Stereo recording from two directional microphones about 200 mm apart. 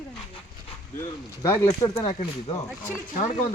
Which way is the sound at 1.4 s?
20° left (ahead or behind).